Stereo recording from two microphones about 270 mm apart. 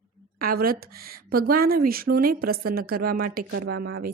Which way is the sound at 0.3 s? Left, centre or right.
Right.